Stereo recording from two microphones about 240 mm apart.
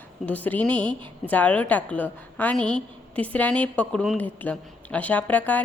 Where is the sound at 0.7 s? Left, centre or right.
Centre.